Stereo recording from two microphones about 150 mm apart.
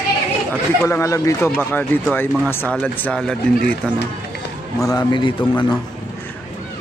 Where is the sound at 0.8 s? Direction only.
20° left (ahead or behind).